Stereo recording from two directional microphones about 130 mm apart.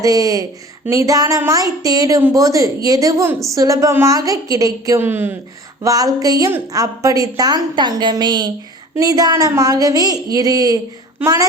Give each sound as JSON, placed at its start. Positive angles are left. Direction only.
{"t": 0.0, "sound": "a woman's voice", "side_deg": -25}
{"t": 5.8, "sound": "a woman's voice", "side_deg": -30}